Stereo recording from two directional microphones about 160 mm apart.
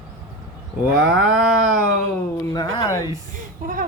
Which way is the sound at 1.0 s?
5° right (ahead or behind).